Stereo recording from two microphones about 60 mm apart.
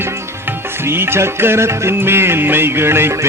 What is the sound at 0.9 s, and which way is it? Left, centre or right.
A man's voice, right.